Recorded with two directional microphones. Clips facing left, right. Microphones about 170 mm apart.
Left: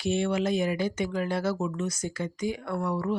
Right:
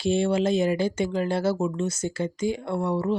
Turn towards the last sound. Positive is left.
turn(degrees=-25)  # may be behind; listen again after turning